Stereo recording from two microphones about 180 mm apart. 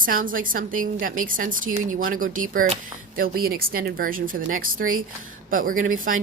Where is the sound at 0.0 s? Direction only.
50° right (ahead or behind).